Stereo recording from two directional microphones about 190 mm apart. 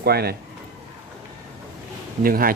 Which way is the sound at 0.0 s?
55° right (ahead or behind).